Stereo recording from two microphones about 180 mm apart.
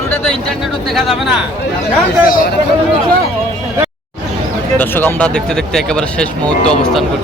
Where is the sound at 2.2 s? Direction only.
50° left (ahead or behind).